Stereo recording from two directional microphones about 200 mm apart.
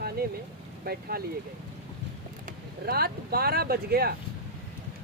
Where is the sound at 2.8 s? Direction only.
50° right (ahead or behind).